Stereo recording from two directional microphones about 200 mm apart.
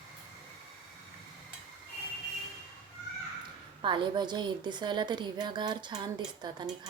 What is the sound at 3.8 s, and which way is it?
A woman's voice, 25° right (ahead or behind).